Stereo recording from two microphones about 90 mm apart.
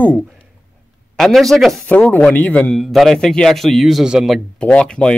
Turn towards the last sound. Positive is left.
turn(degrees=10)  # may be behind; listen again after turning